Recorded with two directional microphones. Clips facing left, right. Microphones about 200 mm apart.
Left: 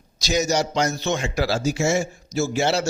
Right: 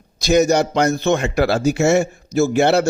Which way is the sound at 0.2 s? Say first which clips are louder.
Right 7 dB; 55° right (ahead or behind).